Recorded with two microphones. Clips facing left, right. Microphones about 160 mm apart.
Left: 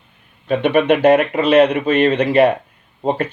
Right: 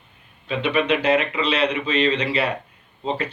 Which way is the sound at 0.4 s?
50° left (ahead or behind).